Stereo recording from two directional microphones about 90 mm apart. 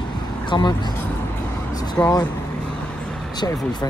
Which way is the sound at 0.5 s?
55° left (ahead or behind).